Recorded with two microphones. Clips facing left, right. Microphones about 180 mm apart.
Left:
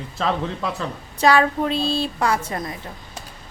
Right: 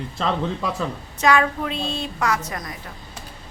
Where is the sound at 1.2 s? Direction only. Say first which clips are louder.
Left 2 dB; 30° left (ahead or behind).